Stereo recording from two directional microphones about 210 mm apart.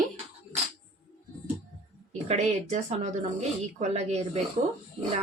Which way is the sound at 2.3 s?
30° right (ahead or behind).